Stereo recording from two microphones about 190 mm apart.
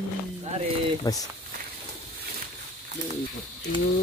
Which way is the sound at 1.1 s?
20° left (ahead or behind).